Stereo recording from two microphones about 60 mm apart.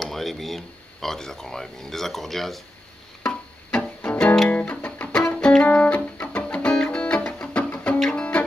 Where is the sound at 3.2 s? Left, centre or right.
Left.